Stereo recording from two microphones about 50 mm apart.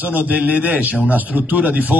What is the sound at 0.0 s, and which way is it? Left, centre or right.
A man's voice, right.